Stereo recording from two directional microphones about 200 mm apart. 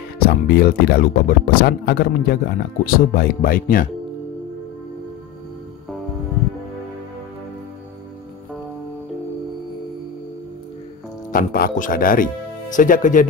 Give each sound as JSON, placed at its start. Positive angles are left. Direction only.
{"t": 0.2, "sound": "speech", "side_deg": 50}
{"t": 11.3, "sound": "speech", "side_deg": 45}